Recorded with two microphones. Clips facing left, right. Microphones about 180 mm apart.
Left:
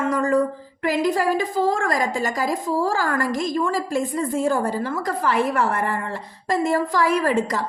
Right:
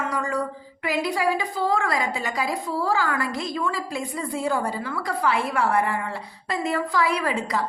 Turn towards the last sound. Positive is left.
turn(degrees=45)  # may be behind; listen again after turning